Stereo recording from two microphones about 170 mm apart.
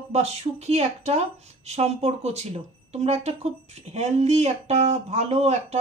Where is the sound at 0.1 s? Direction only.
40° right (ahead or behind).